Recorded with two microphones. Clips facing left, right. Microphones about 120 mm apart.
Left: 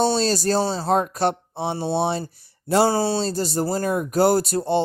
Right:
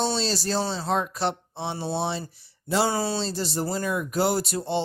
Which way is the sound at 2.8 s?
35° left (ahead or behind).